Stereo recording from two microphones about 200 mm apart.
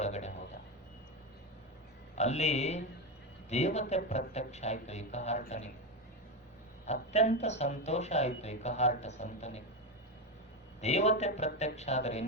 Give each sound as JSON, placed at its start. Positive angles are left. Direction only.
{"t": 0.0, "sound": "a sound", "side_deg": 35}
{"t": 2.1, "sound": "speech", "side_deg": 35}
{"t": 6.8, "sound": "speech", "side_deg": 35}
{"t": 10.8, "sound": "a man's voice", "side_deg": 35}